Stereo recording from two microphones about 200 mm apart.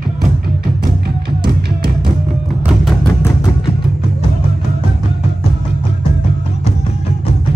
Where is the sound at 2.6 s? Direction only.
Centre (ahead or behind).